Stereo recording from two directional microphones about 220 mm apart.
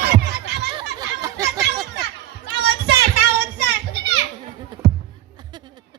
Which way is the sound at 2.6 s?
50° right (ahead or behind).